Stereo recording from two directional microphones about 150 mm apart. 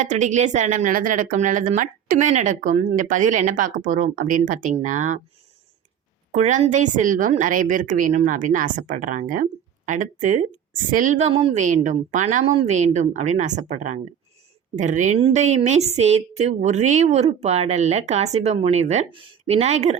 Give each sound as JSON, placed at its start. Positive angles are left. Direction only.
{"t": 0.0, "sound": "a woman's voice", "side_deg": -55}
{"t": 6.3, "sound": "a woman's voice", "side_deg": -55}